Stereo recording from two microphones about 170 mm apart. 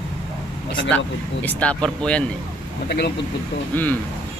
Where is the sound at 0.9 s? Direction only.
10° left (ahead or behind).